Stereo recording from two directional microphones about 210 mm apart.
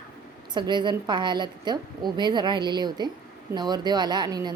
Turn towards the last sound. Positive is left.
turn(degrees=-20)  # may be behind; listen again after turning